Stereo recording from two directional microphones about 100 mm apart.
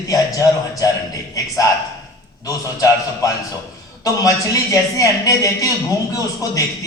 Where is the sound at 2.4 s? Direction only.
35° left (ahead or behind).